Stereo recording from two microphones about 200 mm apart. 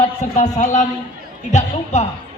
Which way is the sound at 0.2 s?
35° left (ahead or behind).